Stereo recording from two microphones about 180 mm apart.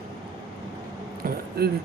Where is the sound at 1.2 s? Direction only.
50° right (ahead or behind).